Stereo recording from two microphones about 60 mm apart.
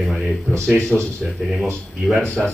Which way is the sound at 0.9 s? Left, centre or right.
Centre.